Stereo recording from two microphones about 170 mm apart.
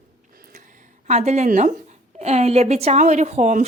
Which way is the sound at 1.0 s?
40° right (ahead or behind).